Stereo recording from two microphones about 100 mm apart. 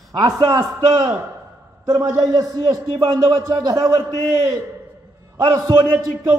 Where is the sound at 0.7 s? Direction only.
50° right (ahead or behind).